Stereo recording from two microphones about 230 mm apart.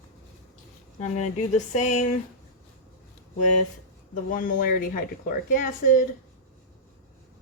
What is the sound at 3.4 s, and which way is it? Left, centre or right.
Speech, left.